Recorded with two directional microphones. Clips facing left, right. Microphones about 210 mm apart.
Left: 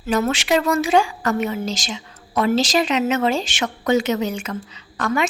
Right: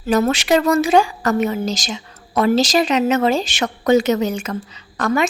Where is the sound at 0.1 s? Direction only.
40° right (ahead or behind).